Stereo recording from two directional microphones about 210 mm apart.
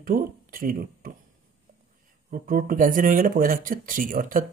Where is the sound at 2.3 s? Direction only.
40° right (ahead or behind).